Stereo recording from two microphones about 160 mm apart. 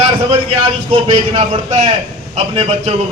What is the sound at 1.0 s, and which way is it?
A man's voice, 40° right (ahead or behind).